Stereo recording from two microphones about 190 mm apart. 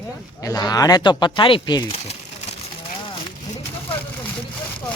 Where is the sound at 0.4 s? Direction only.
20° left (ahead or behind).